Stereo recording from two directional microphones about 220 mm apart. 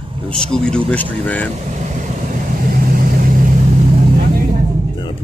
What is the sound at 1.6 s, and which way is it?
Vehicle, 35° right (ahead or behind).